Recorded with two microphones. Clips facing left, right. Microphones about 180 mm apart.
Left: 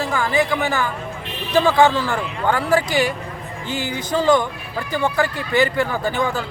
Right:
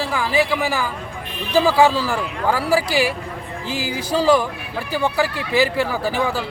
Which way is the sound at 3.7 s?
90° right.